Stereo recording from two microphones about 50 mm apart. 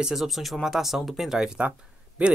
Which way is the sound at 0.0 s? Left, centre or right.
Centre.